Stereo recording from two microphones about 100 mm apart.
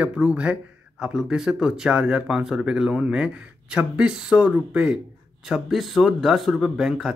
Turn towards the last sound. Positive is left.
turn(degrees=-5)  # may be behind; listen again after turning